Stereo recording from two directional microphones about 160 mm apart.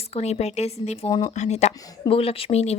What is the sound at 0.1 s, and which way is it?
Speech, 40° left (ahead or behind).